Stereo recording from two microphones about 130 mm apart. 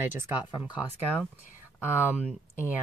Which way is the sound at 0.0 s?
15° right (ahead or behind).